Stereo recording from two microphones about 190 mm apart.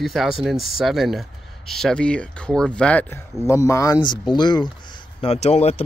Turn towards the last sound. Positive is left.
turn(degrees=35)  # may be behind; listen again after turning